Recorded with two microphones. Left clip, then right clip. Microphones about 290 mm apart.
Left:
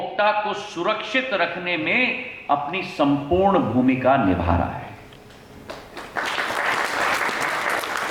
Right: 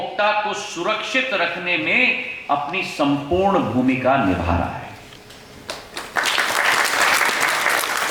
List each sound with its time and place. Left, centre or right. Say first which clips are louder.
0.2 s speech: right 1 dB; centre
3.2 s speech: even; left
3.4 s a man's voice: even; centre
6.2 s applause: right 5 dB; centre